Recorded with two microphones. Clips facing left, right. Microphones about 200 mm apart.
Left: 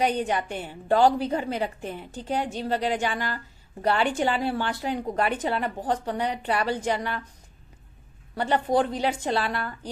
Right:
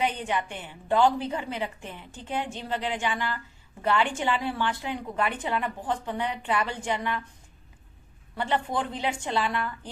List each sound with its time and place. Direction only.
0.0 s a woman's voice: 40° left (ahead or behind)
8.4 s a woman's voice: 40° left (ahead or behind)